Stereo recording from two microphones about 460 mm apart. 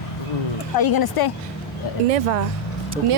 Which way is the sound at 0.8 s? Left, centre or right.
Left.